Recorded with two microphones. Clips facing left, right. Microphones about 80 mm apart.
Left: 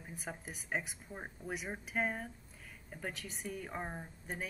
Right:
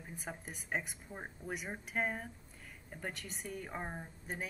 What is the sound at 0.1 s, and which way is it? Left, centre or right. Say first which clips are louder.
Speech: left 1 dB; centre.